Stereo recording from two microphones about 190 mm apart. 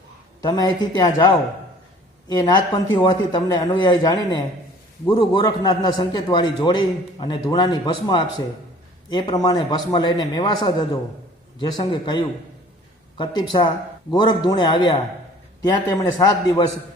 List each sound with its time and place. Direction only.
0.4 s a man's voice: 20° left (ahead or behind)